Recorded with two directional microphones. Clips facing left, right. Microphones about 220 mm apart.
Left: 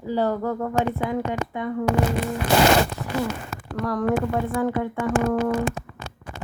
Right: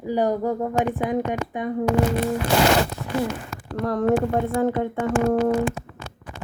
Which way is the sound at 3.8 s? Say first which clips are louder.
Right 3 dB; 25° right (ahead or behind).